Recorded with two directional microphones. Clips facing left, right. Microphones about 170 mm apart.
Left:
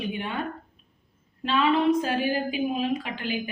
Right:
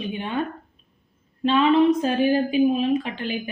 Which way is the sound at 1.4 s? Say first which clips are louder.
Right 5 dB; 25° right (ahead or behind).